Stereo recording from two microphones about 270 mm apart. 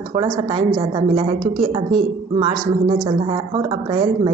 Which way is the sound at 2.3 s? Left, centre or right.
Centre.